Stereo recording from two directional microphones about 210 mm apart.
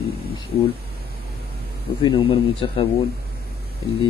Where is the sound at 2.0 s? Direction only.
20° left (ahead or behind).